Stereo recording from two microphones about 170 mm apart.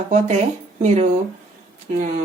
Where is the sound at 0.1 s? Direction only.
45° right (ahead or behind).